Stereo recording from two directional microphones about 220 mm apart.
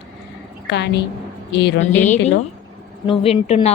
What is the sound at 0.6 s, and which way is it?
A woman's voice, 50° left (ahead or behind).